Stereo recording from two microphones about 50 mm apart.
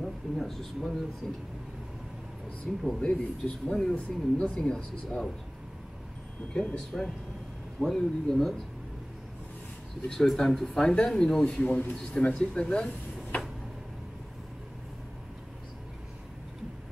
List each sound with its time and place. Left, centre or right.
0.0 s speech: centre
2.7 s speech: centre
3.0 s speech: left
3.6 s speech: centre
3.9 s speech: left
6.5 s speech: centre
7.8 s speech: centre
10.0 s speech: centre